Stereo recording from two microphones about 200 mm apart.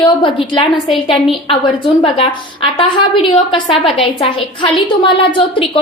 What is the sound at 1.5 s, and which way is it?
A woman's voice, 25° left (ahead or behind).